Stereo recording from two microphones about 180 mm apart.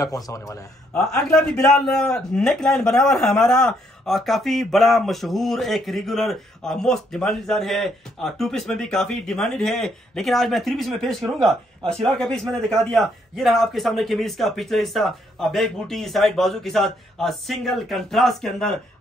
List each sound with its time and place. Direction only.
0.0 s a man's voice: 20° left (ahead or behind)
1.1 s a man's voice: 5° left (ahead or behind)